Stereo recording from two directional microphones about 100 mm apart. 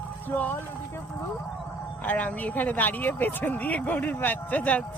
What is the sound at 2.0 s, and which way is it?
Speech, 15° left (ahead or behind).